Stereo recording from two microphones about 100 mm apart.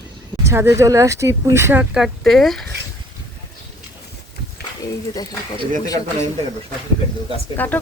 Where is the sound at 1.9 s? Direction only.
Centre (ahead or behind).